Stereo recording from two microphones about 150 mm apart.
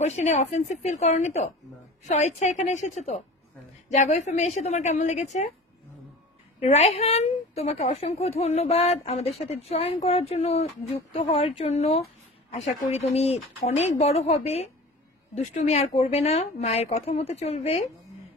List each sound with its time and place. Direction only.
0.0 s a woman's voice: 50° left (ahead or behind)
6.6 s a woman's voice: 45° left (ahead or behind)